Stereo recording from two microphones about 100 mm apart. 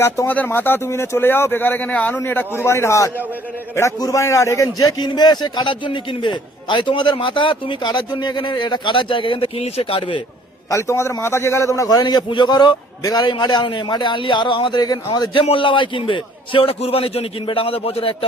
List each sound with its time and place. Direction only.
0.3 s a man's voice: 20° left (ahead or behind); by 10.2 s 80° left
10.7 s a man's voice: 30° left (ahead or behind)
15.3 s a man's voice: 60° left (ahead or behind)